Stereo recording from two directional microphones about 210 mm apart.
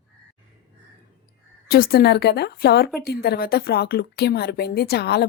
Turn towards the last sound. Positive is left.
turn(degrees=50)  # may be behind; listen again after turning